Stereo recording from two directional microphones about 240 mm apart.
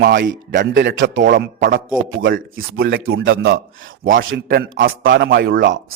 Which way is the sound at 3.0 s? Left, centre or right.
Right.